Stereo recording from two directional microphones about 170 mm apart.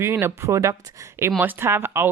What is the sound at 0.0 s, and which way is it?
Speech, 15° right (ahead or behind).